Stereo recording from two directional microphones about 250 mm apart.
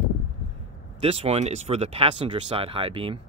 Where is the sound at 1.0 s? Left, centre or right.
Right.